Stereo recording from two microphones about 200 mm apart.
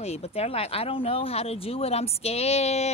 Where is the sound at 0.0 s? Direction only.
30° left (ahead or behind).